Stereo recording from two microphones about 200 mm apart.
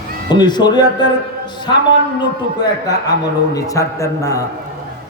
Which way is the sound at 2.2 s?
20° left (ahead or behind).